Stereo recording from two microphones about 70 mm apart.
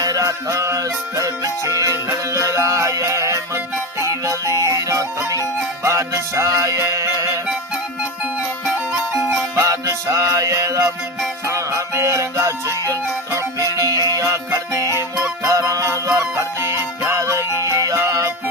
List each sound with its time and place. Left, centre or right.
0.0 s music: right
9.6 s music: right
15.1 s music: right